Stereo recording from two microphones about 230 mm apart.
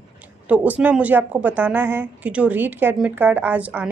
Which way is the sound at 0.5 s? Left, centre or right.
Centre.